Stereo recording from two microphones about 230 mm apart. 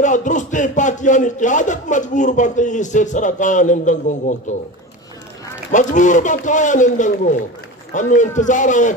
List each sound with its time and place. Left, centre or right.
0.0 s speech: left
5.7 s speech: left